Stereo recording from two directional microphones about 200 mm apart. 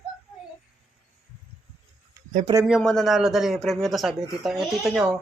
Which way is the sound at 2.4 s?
15° right (ahead or behind).